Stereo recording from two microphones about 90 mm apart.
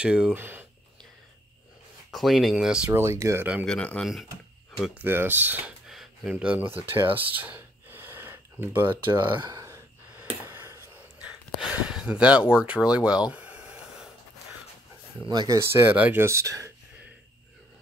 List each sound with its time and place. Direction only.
0.0 s speech: 15° right (ahead or behind)
0.4 s speech: 25° right (ahead or behind)
2.0 s speech: centre (ahead or behind)
2.9 s speech: 30° right (ahead or behind)
3.6 s speech: 10° left (ahead or behind)
4.0 s speech: centre (ahead or behind)
4.9 s speech: 25° right (ahead or behind)
5.9 s a sound: 5° right (ahead or behind)
6.5 s speech: 20° right (ahead or behind)
9.5 s gasp: 35° right (ahead or behind)
10.1 s a sound: 25° right (ahead or behind)
11.1 s a sound: 15° right (ahead or behind)
15.2 s speech: 50° right (ahead or behind)
15.9 s speech: 20° right (ahead or behind); by 16.7 s 35° right (ahead or behind)